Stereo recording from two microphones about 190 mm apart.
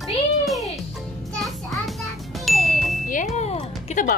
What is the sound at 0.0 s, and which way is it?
Music, centre (ahead or behind).